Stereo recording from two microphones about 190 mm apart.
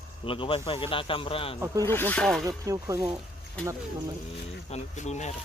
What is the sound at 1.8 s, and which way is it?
Speech, 10° left (ahead or behind).